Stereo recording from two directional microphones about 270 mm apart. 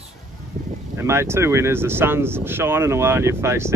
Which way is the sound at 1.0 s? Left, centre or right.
Centre.